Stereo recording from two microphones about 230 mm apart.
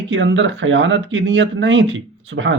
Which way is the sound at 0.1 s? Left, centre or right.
Right.